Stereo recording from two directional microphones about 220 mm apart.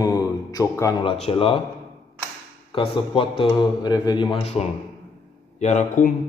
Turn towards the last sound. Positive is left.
turn(degrees=35)  # may be behind; listen again after turning